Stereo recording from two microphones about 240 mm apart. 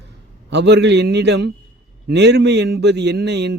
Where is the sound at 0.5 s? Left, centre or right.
Right.